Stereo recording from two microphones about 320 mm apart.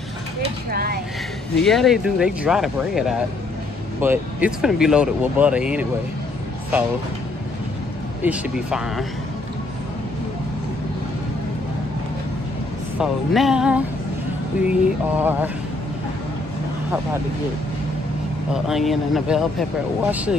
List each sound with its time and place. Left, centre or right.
0.7 s speech: right
1.6 s speech: centre
8.2 s speech: centre
13.0 s speech: centre
18.5 s speech: centre